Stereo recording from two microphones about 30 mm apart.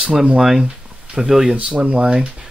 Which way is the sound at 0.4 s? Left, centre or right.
Centre.